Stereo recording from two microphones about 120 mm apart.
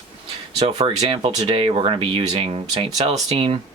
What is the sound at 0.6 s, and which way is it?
Speech, 45° right (ahead or behind).